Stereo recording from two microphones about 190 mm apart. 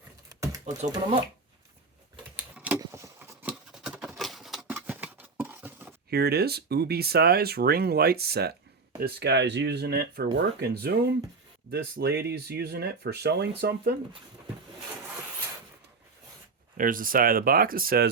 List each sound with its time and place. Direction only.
0.3 s a sound: 15° right (ahead or behind)
0.9 s speech: 20° right (ahead or behind)
2.6 s keys jangling: 10° right (ahead or behind)
2.8 s patter: 15° right (ahead or behind)
4.2 s a sound: centre (ahead or behind)
6.1 s speech: 55° right (ahead or behind)
16.7 s speech: 45° right (ahead or behind)